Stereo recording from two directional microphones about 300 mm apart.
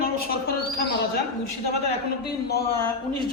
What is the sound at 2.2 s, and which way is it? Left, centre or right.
Speech, left.